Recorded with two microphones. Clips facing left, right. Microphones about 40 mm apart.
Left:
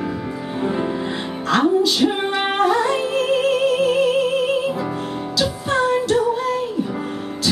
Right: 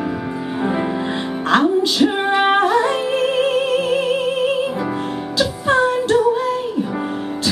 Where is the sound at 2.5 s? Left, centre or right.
Right.